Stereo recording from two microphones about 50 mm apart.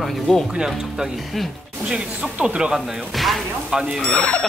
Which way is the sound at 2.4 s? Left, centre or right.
Centre.